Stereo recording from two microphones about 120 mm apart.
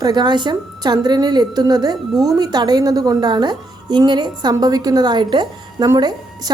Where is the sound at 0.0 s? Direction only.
40° right (ahead or behind).